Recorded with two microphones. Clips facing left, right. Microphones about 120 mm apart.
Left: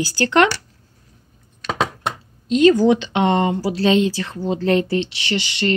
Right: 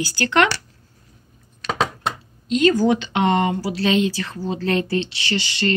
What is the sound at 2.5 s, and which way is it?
Speech, 25° left (ahead or behind).